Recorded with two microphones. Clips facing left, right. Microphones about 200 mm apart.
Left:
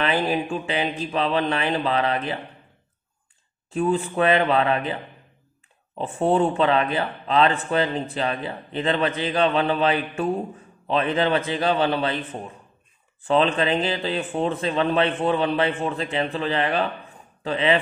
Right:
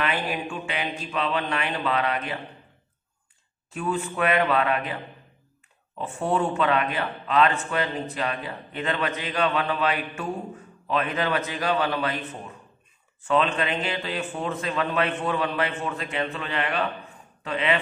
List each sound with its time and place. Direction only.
0.0 s a man's voice: 30° left (ahead or behind)
3.7 s a man's voice: 30° left (ahead or behind)